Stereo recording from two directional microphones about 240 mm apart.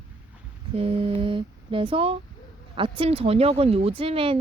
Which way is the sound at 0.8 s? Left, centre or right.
Right.